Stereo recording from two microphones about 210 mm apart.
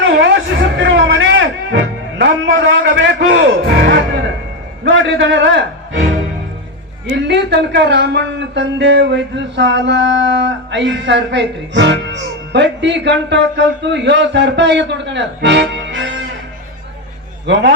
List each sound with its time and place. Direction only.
0.0 s a sound: 60° right (ahead or behind)
2.9 s speech: 55° right (ahead or behind)
4.8 s a man's voice: 60° right (ahead or behind)
7.1 s speech: 55° right (ahead or behind)
17.4 s a man's voice: 55° right (ahead or behind)